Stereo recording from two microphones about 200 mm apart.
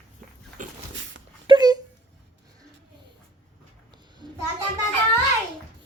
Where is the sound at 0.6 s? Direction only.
40° right (ahead or behind).